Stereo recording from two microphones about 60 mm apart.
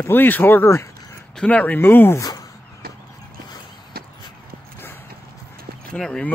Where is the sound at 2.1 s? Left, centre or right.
Left.